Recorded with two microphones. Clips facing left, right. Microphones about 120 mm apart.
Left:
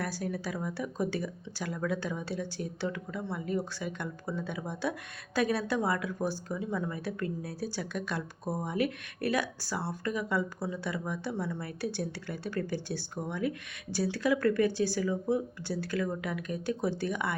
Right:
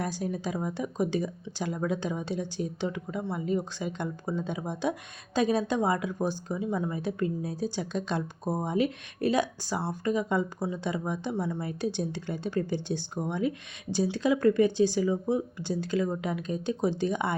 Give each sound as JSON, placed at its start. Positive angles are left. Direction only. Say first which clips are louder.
{"t": 0.0, "sound": "speech", "louder": "right 3 dB", "side_deg": -20}